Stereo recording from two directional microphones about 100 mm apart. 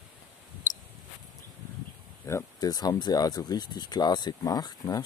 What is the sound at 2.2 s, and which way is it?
Speech, 35° left (ahead or behind).